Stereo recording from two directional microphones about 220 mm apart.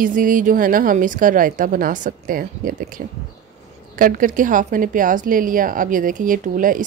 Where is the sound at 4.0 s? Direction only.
40° right (ahead or behind).